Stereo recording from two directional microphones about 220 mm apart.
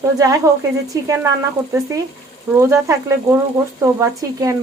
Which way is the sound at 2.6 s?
10° right (ahead or behind).